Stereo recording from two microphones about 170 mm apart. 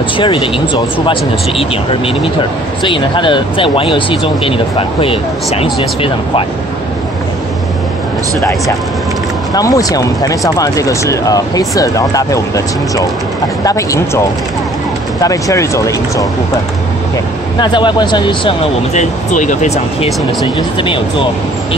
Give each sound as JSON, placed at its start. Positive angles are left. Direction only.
{"t": 0.2, "sound": "speech", "side_deg": 30}
{"t": 9.6, "sound": "speech", "side_deg": 20}
{"t": 15.2, "sound": "speech", "side_deg": 20}
{"t": 17.6, "sound": "speech", "side_deg": 25}
{"t": 18.9, "sound": "speech", "side_deg": 45}